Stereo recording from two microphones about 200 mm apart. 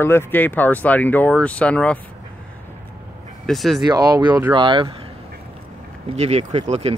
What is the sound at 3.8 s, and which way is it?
Speech, 20° right (ahead or behind).